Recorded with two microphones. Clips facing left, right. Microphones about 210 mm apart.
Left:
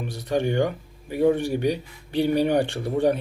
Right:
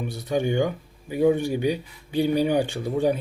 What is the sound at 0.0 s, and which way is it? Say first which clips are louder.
A man's voice: even; 10° right (ahead or behind).